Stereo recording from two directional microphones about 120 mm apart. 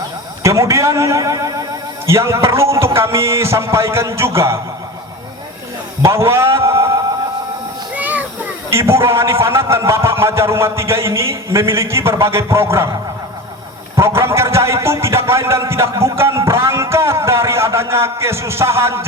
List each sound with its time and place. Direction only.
0.4 s a man's voice: 25° right (ahead or behind)
6.0 s speech: 25° right (ahead or behind)
7.9 s music: 15° right (ahead or behind)
8.7 s a man's voice: 20° right (ahead or behind)
13.9 s a sound: 25° right (ahead or behind)